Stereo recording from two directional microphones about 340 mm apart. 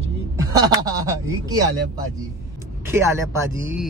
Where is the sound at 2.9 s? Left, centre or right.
Centre.